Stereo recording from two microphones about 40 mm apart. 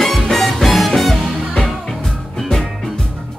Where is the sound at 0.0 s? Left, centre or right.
Centre.